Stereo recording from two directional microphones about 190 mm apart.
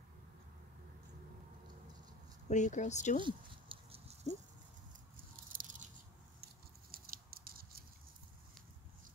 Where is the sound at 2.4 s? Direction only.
40° left (ahead or behind).